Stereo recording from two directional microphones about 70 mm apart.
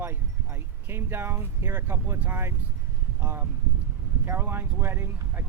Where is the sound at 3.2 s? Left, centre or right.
Right.